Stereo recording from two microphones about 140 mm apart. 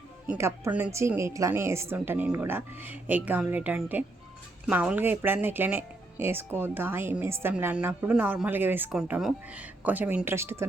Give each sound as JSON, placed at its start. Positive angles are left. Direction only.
{"t": 0.3, "sound": "speech", "side_deg": -20}